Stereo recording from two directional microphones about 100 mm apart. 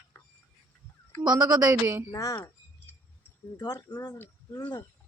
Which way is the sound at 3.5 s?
40° left (ahead or behind).